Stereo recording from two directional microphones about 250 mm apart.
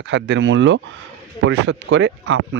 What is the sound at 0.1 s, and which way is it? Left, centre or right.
Speech, right.